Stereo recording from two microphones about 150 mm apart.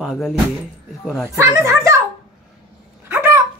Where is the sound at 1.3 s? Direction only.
20° right (ahead or behind).